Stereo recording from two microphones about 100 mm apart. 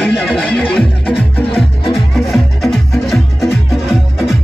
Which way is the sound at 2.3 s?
Centre (ahead or behind).